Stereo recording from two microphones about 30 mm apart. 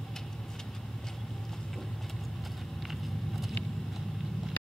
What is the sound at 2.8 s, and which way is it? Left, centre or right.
Vehicle, centre.